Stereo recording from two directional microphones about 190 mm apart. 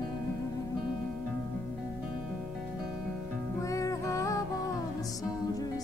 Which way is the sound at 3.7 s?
15° left (ahead or behind).